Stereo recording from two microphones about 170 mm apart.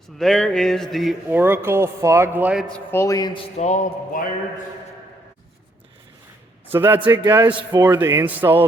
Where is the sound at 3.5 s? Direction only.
45° left (ahead or behind).